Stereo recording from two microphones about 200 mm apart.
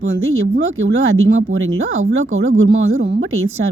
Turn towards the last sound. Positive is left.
turn(degrees=-90)